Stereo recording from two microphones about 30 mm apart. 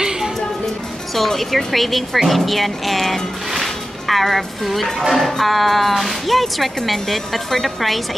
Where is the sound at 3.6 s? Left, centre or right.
Centre.